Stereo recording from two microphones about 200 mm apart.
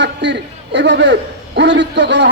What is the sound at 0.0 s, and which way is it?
A man's voice, 60° right (ahead or behind).